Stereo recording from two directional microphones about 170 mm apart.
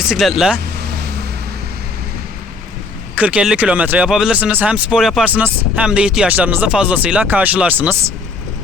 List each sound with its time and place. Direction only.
0.1 s speech: centre (ahead or behind)
0.9 s vehicle: 70° right (ahead or behind)
3.2 s speech: 5° right (ahead or behind)